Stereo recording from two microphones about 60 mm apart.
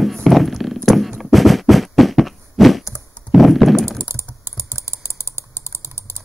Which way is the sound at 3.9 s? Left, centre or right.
Right.